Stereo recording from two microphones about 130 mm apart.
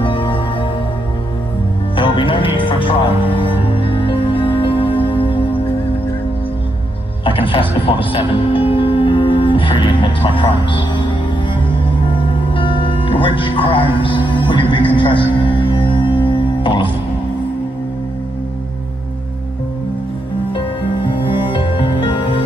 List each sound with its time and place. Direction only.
0.0 s music: 40° left (ahead or behind)
2.0 s music: 40° left (ahead or behind)
7.2 s music: 45° left (ahead or behind)
12.4 s music: 40° left (ahead or behind)
15.0 s speech: 40° left (ahead or behind)
15.4 s music: 35° left (ahead or behind)
20.5 s music: 40° left (ahead or behind)